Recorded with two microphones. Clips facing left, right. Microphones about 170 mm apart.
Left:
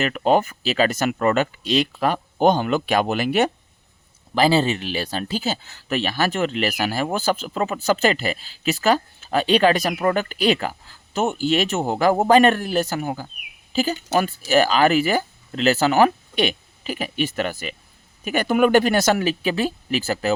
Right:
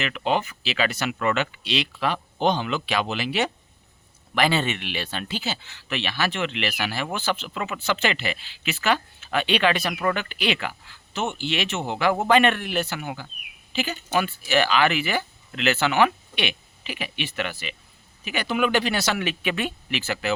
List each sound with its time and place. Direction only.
0.0 s speech: 45° left (ahead or behind)
4.4 s speech: 30° left (ahead or behind)